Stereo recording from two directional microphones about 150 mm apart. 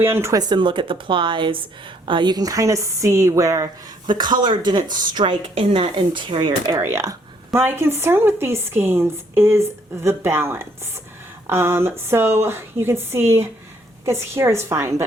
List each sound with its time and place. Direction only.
0.0 s a woman's voice: 15° right (ahead or behind)
6.7 s speech: 15° right (ahead or behind)